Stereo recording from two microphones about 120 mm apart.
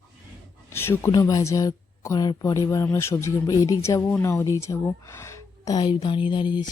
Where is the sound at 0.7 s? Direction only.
20° left (ahead or behind).